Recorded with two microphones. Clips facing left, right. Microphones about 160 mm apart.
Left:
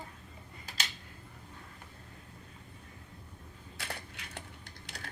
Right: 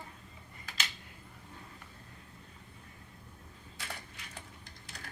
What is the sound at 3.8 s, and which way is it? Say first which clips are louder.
Crushing: left 3 dB; 70° left (ahead or behind).